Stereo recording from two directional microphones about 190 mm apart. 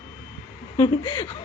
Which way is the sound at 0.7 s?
25° left (ahead or behind).